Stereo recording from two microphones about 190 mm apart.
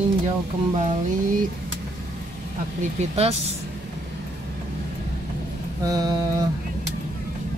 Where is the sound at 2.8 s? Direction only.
35° right (ahead or behind).